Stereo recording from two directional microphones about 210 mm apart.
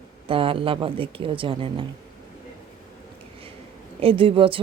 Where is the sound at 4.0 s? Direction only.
25° right (ahead or behind).